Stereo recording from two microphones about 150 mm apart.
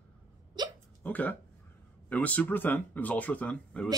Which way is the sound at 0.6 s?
30° right (ahead or behind).